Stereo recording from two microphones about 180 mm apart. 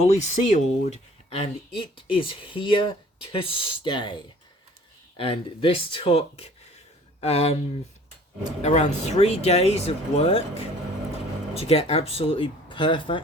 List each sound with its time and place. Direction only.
0.1 s speech: 40° left (ahead or behind)
5.1 s speech: 30° left (ahead or behind)
8.6 s speech: 40° left (ahead or behind)